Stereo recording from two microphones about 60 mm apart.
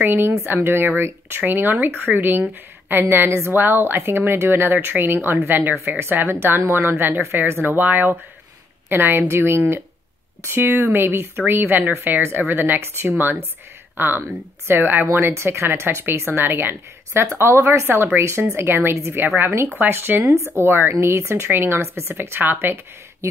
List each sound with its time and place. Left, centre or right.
0.0 s speech: right
3.3 s a woman's voice: right